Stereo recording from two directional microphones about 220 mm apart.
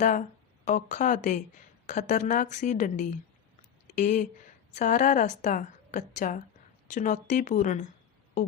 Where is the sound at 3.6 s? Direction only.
35° left (ahead or behind).